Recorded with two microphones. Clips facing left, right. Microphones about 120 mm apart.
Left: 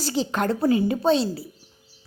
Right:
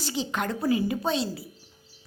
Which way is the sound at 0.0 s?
40° left (ahead or behind).